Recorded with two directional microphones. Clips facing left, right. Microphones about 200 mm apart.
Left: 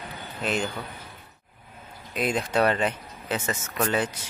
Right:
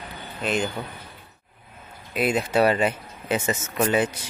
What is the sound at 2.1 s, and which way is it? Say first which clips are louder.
Speech: right 3 dB; 5° right (ahead or behind).